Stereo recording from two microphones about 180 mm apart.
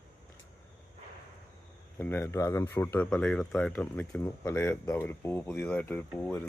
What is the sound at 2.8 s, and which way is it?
Speech, 10° left (ahead or behind).